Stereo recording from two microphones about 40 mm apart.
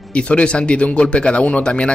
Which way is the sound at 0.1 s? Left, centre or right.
Left.